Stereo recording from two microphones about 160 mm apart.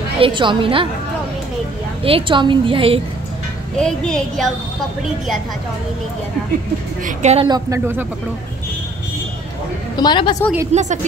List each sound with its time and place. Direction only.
0.2 s a woman's voice: 30° right (ahead or behind)
2.0 s a woman's voice: 35° right (ahead or behind)
3.7 s speech: 5° left (ahead or behind)
7.1 s a woman's voice: 45° right (ahead or behind)
7.4 s speech: 20° right (ahead or behind)
9.9 s a woman's voice: 30° left (ahead or behind)
10.7 s a woman's voice: 45° right (ahead or behind)